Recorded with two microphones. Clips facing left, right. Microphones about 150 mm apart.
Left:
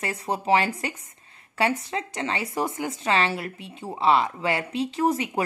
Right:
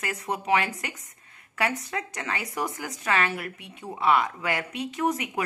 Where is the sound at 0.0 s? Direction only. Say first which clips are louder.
Left 3 dB; 30° left (ahead or behind).